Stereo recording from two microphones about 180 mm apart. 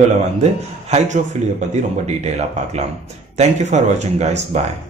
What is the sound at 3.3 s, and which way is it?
Speech, 40° right (ahead or behind).